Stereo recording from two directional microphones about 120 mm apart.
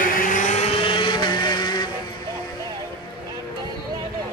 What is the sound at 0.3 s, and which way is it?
Vehicle, 90° left.